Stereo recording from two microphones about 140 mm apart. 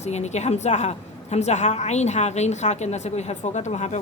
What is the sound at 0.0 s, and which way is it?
A woman's voice, 50° left (ahead or behind).